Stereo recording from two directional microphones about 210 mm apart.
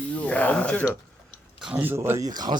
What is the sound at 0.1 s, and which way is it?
Speech, 5° left (ahead or behind).